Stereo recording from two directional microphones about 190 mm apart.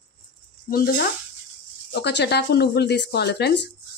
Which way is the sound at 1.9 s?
65° left (ahead or behind).